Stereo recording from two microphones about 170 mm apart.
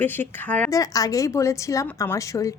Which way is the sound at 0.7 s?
20° left (ahead or behind).